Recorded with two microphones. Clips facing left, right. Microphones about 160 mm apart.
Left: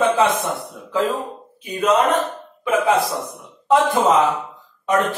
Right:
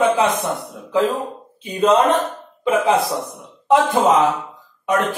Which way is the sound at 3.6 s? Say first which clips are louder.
Right 1 dB; 20° right (ahead or behind).